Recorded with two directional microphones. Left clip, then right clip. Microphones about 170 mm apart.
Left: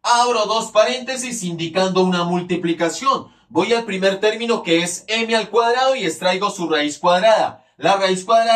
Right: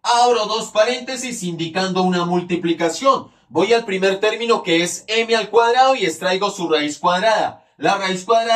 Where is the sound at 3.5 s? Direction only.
25° right (ahead or behind).